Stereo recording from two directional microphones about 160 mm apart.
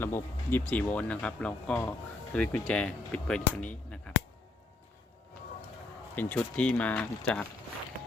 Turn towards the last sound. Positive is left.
turn(degrees=5)  # may be behind; listen again after turning